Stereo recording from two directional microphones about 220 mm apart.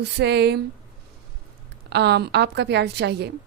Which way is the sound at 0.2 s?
50° right (ahead or behind).